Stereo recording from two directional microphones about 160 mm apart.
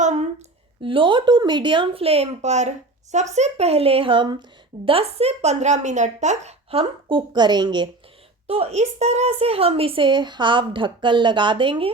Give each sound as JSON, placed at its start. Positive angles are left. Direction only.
{"t": 0.0, "sound": "a sound", "side_deg": -50}
{"t": 0.8, "sound": "a woman's voice", "side_deg": -35}
{"t": 8.4, "sound": "a woman's voice", "side_deg": -40}